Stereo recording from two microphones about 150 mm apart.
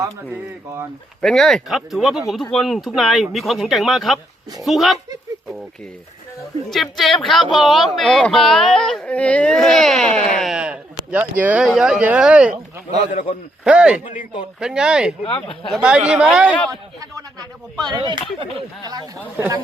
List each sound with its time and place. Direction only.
1.2 s speech: 5° left (ahead or behind)
6.9 s speech: centre (ahead or behind)
13.7 s speech: 5° right (ahead or behind)
16.6 s speech: 20° right (ahead or behind)